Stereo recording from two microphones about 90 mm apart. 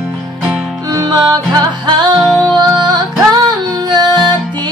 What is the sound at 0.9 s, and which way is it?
Music, 50° right (ahead or behind).